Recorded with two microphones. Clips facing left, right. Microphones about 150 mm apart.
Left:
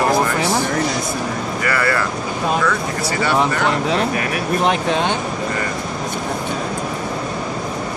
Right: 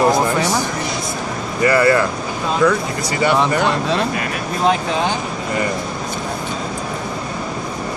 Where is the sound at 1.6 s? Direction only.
20° right (ahead or behind).